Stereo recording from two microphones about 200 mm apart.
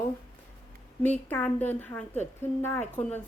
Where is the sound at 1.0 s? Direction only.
10° left (ahead or behind).